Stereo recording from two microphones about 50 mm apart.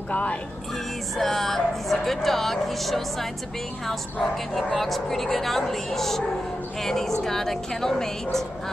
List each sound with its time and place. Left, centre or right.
0.1 s speech: left
1.1 s a woman's voice: centre